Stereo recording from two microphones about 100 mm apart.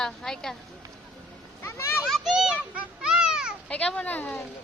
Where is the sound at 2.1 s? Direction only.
5° right (ahead or behind).